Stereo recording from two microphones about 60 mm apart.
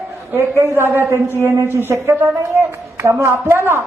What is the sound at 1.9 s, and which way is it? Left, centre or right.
Speech, right.